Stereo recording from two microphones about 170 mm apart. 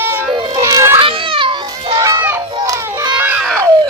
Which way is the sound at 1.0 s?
30° right (ahead or behind).